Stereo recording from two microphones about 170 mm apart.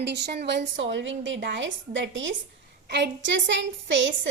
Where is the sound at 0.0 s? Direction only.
85° right.